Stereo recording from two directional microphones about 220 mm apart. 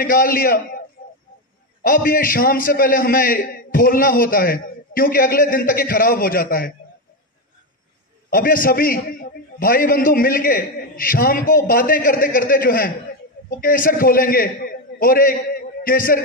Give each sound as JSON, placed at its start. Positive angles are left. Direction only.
{"t": 0.0, "sound": "a man's voice", "side_deg": 40}
{"t": 8.3, "sound": "a man's voice", "side_deg": 40}